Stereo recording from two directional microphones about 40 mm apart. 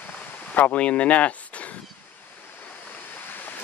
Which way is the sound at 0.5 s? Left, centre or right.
Left.